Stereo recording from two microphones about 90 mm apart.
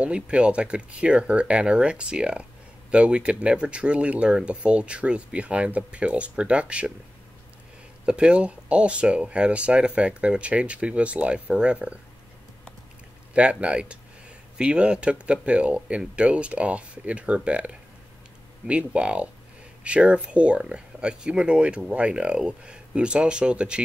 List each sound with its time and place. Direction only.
0.0 s speech: 10° right (ahead or behind)
8.0 s speech: 10° right (ahead or behind)
13.3 s speech: 15° right (ahead or behind)